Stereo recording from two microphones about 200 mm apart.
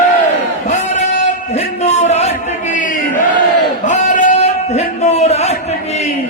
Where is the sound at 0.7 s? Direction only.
35° left (ahead or behind).